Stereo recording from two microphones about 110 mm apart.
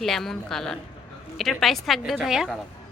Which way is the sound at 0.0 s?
5° left (ahead or behind).